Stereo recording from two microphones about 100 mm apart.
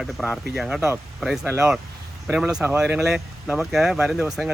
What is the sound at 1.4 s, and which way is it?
Speech, 25° right (ahead or behind).